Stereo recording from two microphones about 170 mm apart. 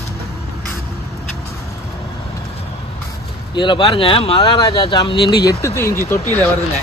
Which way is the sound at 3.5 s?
30° left (ahead or behind).